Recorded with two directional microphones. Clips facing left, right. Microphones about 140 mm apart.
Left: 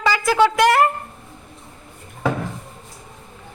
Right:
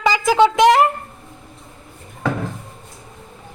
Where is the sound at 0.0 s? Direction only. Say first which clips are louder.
Right 2 dB; 15° right (ahead or behind).